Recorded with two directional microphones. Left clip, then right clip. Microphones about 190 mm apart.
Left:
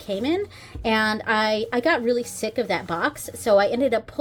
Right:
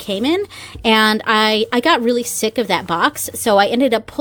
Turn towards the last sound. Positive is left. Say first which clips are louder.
# right 6 dB
turn(degrees=-40)  # may be behind; listen again after turning